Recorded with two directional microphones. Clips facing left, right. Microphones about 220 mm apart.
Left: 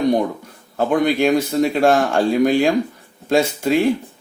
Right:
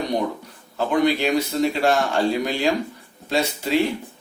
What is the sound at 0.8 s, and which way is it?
Speech, 50° left (ahead or behind).